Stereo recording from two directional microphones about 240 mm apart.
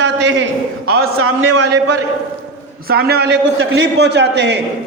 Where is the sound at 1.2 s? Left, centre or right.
Right.